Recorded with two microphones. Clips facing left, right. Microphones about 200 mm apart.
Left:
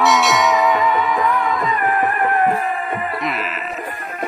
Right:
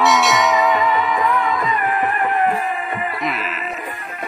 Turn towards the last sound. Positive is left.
turn(degrees=0)  # may be behind; listen again after turning